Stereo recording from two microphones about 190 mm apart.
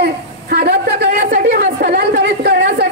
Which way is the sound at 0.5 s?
55° right (ahead or behind).